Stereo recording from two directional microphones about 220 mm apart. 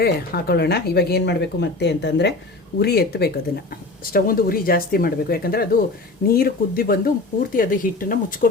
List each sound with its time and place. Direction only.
0.0 s speech: 45° left (ahead or behind)